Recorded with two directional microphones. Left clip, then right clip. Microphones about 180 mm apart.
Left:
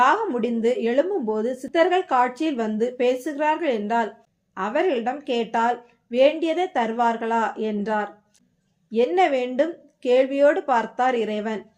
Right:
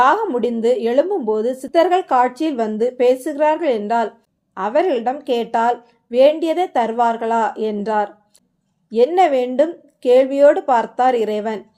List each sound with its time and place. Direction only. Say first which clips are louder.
0.0 s a woman's voice: right 4 dB; 30° right (ahead or behind)